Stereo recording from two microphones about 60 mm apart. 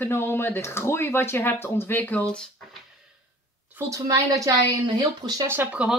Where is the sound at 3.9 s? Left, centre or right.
Right.